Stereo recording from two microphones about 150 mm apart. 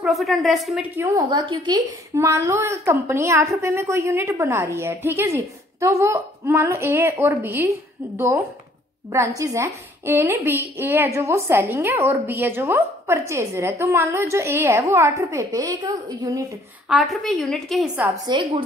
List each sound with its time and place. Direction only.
0.0 s a woman's voice: centre (ahead or behind)
0.8 s a woman's voice: 15° right (ahead or behind)
1.1 s a woman's voice: 30° right (ahead or behind)
2.1 s a woman's voice: 20° right (ahead or behind)
9.1 s a woman's voice: 20° right (ahead or behind)
16.9 s a woman's voice: centre (ahead or behind)
18.2 s a woman's voice: 30° right (ahead or behind)